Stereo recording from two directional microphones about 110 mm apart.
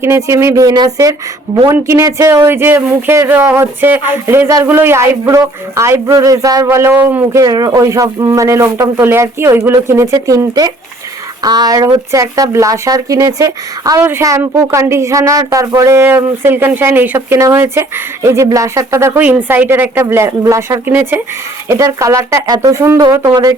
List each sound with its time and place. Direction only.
0.0 s speech: 25° right (ahead or behind)
7.3 s speech: 35° right (ahead or behind)